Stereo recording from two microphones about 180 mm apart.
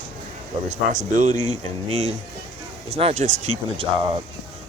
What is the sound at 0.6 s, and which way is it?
Speech, 45° right (ahead or behind).